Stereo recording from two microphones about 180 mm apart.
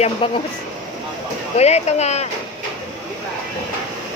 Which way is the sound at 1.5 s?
35° left (ahead or behind).